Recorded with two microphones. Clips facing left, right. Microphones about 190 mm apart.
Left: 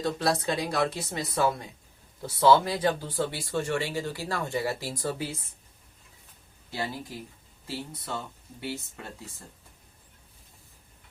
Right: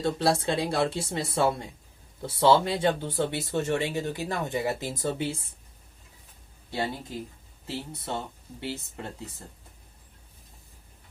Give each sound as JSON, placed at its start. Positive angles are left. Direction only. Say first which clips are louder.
{"t": 0.0, "sound": "speech", "louder": "right 2 dB", "side_deg": -30}
{"t": 6.7, "sound": "speech", "louder": "right 3 dB", "side_deg": -25}